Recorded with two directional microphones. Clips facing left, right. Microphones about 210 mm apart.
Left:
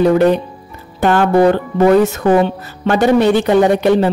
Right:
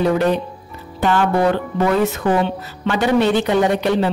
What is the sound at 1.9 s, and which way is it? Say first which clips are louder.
A woman's voice: left 7 dB; 45° left (ahead or behind).